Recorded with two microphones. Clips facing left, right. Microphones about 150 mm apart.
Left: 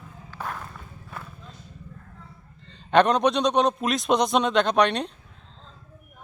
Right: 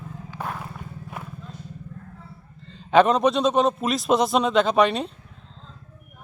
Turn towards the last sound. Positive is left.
turn(degrees=0)  # may be behind; listen again after turning